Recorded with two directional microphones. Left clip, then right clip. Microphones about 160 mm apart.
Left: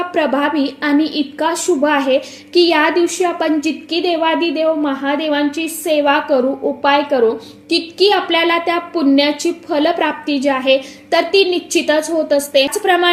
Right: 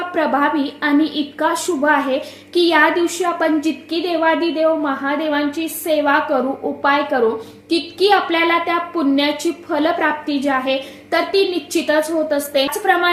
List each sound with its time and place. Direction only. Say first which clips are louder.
0.1 s a woman's voice: right 1 dB; 30° left (ahead or behind)